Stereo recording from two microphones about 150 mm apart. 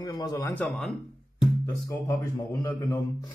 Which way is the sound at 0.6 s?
5° left (ahead or behind).